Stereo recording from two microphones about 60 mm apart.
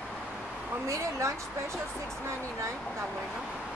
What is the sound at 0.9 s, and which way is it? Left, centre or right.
Speech, right.